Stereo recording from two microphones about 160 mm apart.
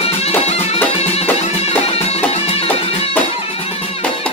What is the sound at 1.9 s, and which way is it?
Music, 40° left (ahead or behind).